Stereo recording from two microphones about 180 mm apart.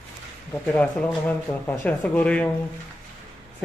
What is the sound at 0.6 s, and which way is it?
Speech, 5° left (ahead or behind).